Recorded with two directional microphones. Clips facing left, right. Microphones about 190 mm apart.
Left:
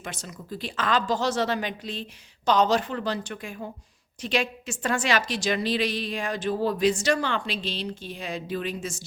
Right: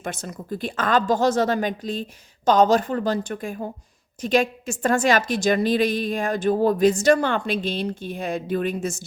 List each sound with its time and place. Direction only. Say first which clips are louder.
0.0 s a woman's voice: right 7 dB; 55° right (ahead or behind)